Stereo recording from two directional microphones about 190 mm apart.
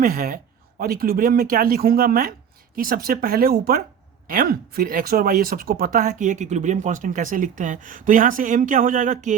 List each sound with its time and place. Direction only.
0.0 s speech: 50° right (ahead or behind)